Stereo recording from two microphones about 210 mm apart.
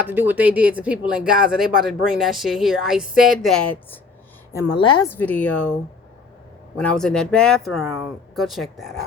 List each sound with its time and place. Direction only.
0.1 s speech: 10° right (ahead or behind)
4.5 s a woman's voice: 20° left (ahead or behind)
5.0 s speech: 10° left (ahead or behind)
6.7 s speech: 5° left (ahead or behind)